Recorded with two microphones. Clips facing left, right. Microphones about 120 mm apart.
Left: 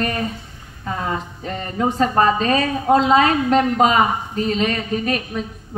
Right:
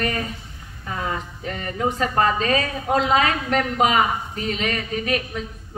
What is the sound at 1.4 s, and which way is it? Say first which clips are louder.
A woman's voice: left 2 dB; 30° left (ahead or behind).